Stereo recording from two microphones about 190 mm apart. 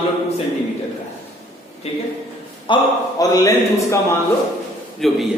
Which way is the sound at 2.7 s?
25° left (ahead or behind).